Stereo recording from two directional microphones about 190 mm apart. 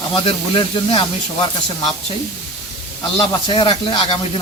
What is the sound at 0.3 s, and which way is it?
Speech, 30° left (ahead or behind).